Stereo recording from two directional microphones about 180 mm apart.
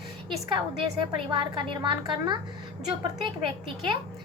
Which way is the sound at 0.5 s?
25° right (ahead or behind).